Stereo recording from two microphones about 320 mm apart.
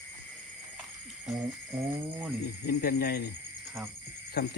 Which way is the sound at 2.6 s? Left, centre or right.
Left.